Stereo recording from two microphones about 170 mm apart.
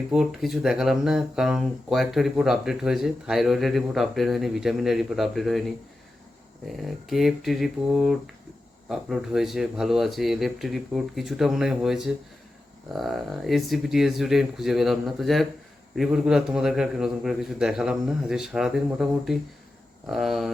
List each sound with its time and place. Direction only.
0.1 s speech: centre (ahead or behind)